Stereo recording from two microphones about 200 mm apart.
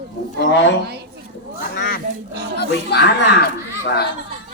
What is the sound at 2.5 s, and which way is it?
Speech, 55° left (ahead or behind).